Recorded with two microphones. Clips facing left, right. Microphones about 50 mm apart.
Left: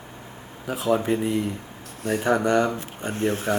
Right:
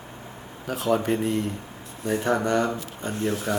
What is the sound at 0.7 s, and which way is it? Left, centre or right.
Speech, centre.